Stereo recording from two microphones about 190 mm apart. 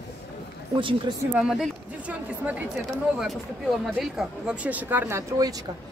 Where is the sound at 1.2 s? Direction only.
5° right (ahead or behind).